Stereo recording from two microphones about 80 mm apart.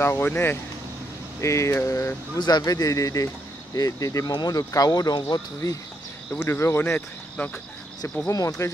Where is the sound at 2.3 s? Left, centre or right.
Left.